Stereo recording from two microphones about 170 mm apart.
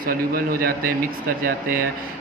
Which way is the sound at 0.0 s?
55° right (ahead or behind).